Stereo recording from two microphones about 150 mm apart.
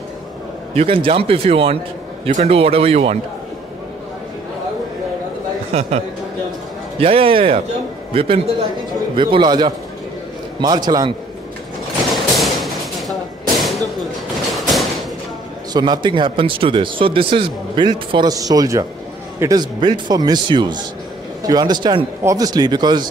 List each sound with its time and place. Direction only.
0.7 s speech: 35° right (ahead or behind)
5.7 s a man's voice: 45° right (ahead or behind); by 11.1 s 30° right (ahead or behind)
12.1 s a sound: centre (ahead or behind)
14.7 s thump: centre (ahead or behind)
15.7 s speech: 30° right (ahead or behind)